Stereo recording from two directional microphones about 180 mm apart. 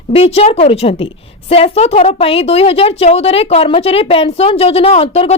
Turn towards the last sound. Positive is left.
turn(degrees=35)  # may be behind; listen again after turning